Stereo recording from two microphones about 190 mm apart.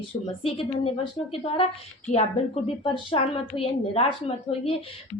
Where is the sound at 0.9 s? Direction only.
30° left (ahead or behind).